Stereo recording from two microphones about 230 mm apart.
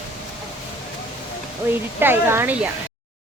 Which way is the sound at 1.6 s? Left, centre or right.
Centre.